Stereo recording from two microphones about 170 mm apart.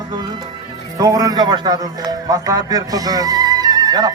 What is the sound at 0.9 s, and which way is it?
A man's voice, 20° right (ahead or behind).